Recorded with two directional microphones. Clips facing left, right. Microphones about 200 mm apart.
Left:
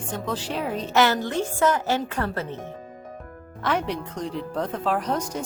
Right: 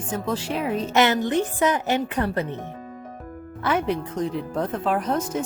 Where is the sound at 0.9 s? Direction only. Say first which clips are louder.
Right 1 dB; 20° right (ahead or behind).